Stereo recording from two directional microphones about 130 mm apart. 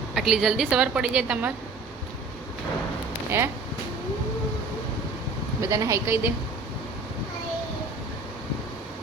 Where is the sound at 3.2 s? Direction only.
20° right (ahead or behind).